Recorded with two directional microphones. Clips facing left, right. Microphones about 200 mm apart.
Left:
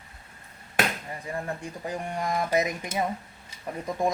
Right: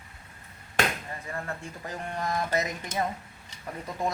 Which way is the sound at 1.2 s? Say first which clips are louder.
Left 4 dB; 15° left (ahead or behind).